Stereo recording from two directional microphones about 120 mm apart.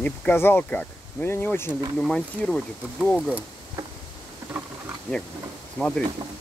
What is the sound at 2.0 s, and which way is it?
Speech, 5° left (ahead or behind).